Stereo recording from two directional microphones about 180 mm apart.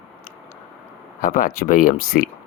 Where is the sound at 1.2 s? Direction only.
50° left (ahead or behind).